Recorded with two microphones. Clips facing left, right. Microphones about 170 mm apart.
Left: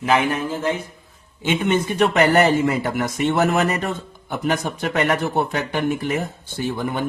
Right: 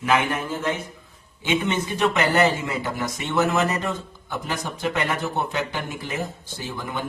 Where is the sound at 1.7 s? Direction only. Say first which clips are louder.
Left 5 dB; 55° left (ahead or behind).